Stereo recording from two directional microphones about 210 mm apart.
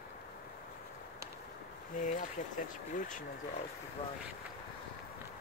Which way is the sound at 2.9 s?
40° left (ahead or behind).